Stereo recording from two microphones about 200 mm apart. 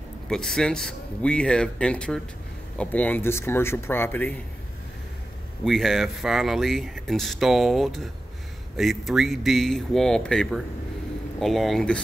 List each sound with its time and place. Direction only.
0.3 s speech: centre (ahead or behind)
5.6 s speech: centre (ahead or behind)